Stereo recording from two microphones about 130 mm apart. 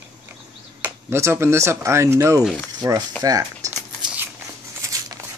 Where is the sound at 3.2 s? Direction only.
30° right (ahead or behind).